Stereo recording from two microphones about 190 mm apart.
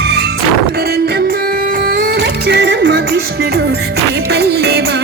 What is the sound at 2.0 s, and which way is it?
Music, 60° right (ahead or behind).